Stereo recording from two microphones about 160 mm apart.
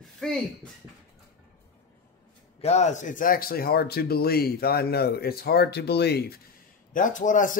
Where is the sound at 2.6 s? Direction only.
45° left (ahead or behind); by 6.2 s 90° left.